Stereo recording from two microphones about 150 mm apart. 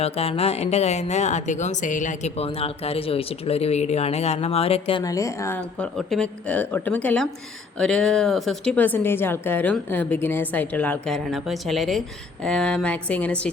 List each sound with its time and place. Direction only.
0.0 s speech: 40° left (ahead or behind)
5.0 s a woman's voice: 20° left (ahead or behind)
5.5 s a woman's voice: 5° left (ahead or behind)